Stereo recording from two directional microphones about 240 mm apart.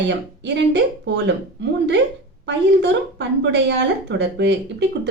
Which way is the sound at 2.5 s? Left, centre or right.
Right.